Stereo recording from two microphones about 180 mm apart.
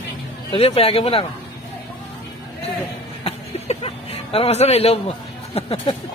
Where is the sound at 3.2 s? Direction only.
35° left (ahead or behind).